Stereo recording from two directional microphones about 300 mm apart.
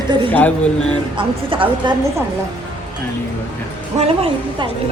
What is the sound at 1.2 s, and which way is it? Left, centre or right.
Speech, centre.